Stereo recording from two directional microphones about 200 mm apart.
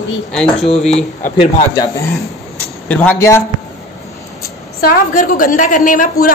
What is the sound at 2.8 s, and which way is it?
Speech, 10° left (ahead or behind).